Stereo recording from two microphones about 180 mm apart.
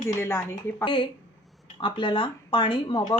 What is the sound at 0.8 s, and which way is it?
A woman's voice, 25° left (ahead or behind).